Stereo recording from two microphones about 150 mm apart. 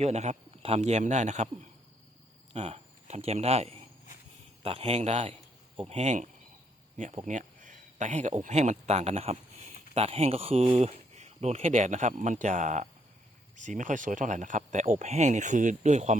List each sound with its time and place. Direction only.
0.0 s speech: 45° right (ahead or behind)
2.5 s a man's voice: 45° right (ahead or behind)
5.7 s speech: 35° right (ahead or behind)
6.0 s speech: 50° right (ahead or behind)
10.0 s speech: 40° right (ahead or behind)